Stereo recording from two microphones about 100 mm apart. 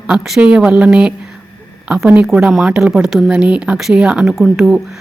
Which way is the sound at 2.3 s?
5° right (ahead or behind).